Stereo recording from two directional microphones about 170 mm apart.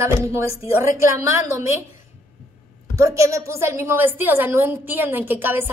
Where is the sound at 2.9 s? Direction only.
20° right (ahead or behind).